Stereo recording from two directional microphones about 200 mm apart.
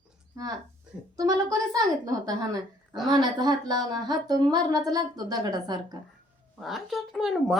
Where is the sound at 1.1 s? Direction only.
20° right (ahead or behind).